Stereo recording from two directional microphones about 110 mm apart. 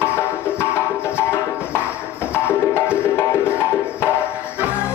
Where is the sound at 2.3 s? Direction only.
20° left (ahead or behind).